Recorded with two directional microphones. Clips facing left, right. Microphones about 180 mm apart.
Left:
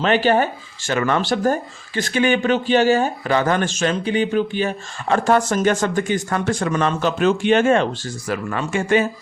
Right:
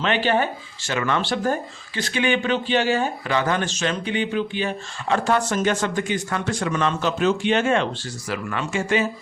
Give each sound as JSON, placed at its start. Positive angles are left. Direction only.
{"t": 0.0, "sound": "speech", "side_deg": 40}